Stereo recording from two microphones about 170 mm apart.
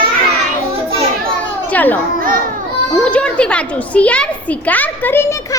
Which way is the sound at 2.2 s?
55° right (ahead or behind).